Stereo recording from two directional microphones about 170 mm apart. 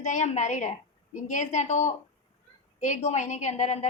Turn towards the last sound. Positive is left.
turn(degrees=40)  # may be behind; listen again after turning